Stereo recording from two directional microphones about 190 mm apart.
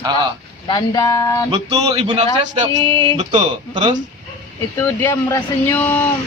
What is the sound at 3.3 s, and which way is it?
Speech, 25° right (ahead or behind).